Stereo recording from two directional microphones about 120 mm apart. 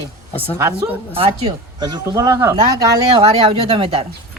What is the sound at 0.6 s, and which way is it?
Speech, 25° right (ahead or behind).